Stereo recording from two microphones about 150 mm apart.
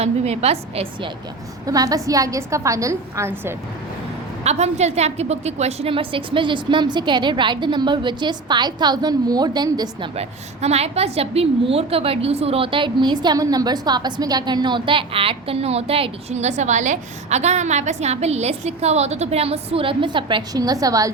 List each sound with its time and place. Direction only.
0.0 s a woman's voice: 45° right (ahead or behind)
1.6 s a woman's voice: 25° right (ahead or behind)
4.4 s a woman's voice: 45° right (ahead or behind); by 10.1 s 25° right (ahead or behind)
10.2 s a woman's voice: 45° right (ahead or behind); by 21.1 s 25° right (ahead or behind)